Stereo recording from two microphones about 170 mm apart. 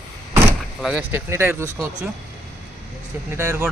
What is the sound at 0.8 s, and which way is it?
Speech, 10° right (ahead or behind).